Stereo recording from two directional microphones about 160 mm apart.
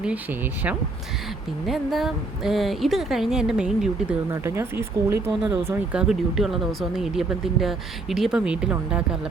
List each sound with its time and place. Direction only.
0.0 s speech: 10° right (ahead or behind)
4.3 s speech: 15° right (ahead or behind)
5.3 s speech: centre (ahead or behind)